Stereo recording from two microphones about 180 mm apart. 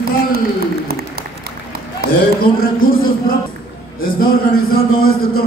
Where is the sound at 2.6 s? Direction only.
55° left (ahead or behind).